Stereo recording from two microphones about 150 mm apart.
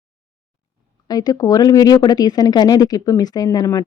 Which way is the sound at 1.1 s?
25° left (ahead or behind).